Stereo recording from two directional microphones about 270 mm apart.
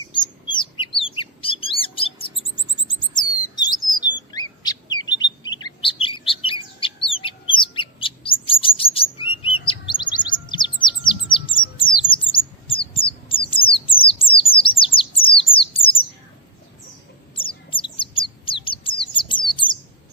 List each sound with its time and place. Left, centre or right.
0.1 s bird: centre
2.4 s chirp: centre
10.5 s bird: centre
17.3 s bird: centre